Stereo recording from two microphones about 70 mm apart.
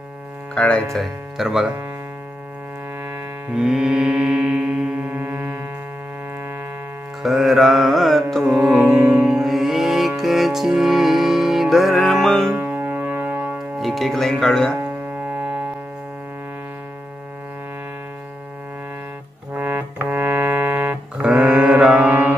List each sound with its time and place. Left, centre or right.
0.6 s speech: centre
0.9 s speech: centre
3.5 s mantra: centre
5.1 s music: right
7.2 s music: centre
9.0 s music: centre
12.5 s music: right
13.7 s speech: centre
20.1 s music: right